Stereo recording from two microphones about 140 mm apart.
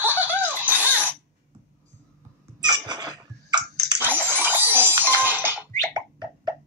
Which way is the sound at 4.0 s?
15° right (ahead or behind).